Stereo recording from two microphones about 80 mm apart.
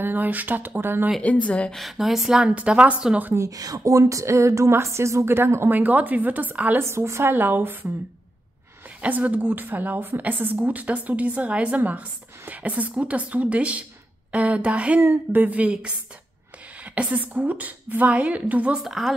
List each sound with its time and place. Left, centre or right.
0.0 s speech: right
1.2 s speech: centre
1.7 s a woman's voice: centre
3.3 s speech: right
6.8 s speech: right
9.0 s a woman's voice: centre
15.0 s speech: right
18.8 s speech: centre